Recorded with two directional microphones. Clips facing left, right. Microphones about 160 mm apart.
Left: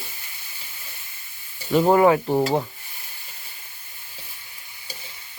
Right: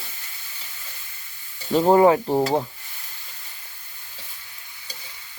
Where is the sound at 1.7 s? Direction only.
25° right (ahead or behind).